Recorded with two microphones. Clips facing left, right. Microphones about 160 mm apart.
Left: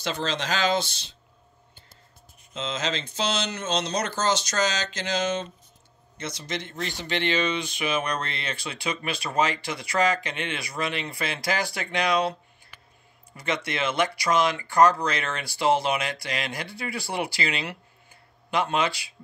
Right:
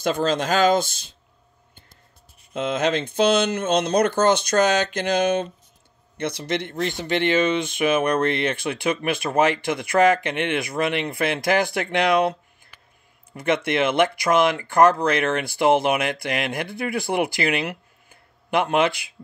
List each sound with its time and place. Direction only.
0.0 s speech: 50° right (ahead or behind)
2.5 s speech: 55° right (ahead or behind)
13.4 s speech: 55° right (ahead or behind)